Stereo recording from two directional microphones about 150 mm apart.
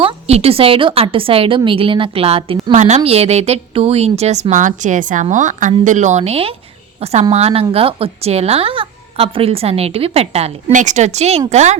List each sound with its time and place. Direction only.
0.0 s a woman's voice: 45° right (ahead or behind)